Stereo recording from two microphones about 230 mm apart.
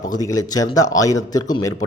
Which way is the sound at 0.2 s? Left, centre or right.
Centre.